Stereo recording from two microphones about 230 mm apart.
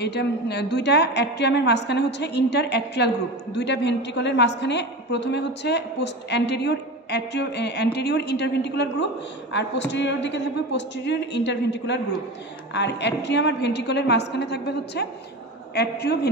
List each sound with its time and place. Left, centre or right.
0.0 s a man's voice: left